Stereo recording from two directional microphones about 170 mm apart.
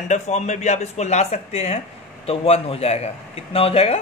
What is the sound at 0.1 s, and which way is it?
Speech, 40° left (ahead or behind).